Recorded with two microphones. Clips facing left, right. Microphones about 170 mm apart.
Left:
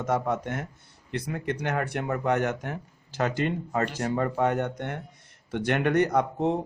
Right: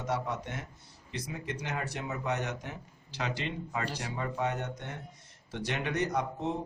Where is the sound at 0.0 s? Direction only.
50° left (ahead or behind).